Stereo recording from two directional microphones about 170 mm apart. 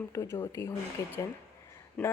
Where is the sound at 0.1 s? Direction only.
15° left (ahead or behind).